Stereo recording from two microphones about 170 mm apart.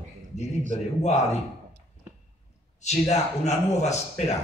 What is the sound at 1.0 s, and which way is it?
Speech, 40° left (ahead or behind).